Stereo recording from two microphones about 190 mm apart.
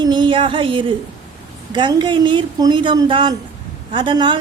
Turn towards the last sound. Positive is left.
turn(degrees=-25)  # may be behind; listen again after turning